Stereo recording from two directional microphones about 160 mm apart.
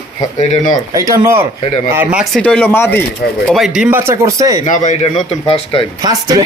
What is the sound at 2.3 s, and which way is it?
Speech, 5° left (ahead or behind).